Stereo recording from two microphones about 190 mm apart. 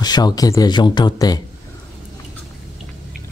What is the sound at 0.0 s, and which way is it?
Speech, 20° left (ahead or behind).